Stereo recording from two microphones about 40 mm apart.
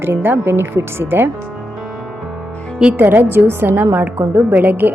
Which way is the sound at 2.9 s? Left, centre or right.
Right.